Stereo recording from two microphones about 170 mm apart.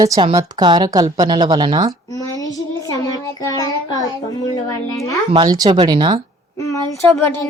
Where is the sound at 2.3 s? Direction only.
20° left (ahead or behind).